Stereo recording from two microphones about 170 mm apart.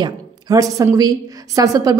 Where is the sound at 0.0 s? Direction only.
20° right (ahead or behind).